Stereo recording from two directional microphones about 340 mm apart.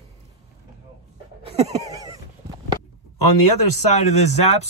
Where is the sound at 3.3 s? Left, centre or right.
Left.